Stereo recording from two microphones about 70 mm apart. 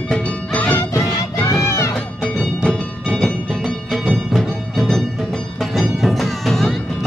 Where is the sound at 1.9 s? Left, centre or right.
Centre.